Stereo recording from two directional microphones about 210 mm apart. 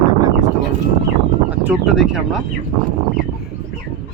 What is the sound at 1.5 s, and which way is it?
Speech, 5° right (ahead or behind).